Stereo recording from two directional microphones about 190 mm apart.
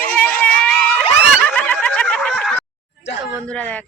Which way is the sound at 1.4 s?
5° left (ahead or behind).